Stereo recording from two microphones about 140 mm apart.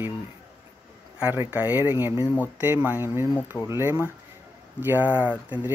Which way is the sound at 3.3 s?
15° left (ahead or behind).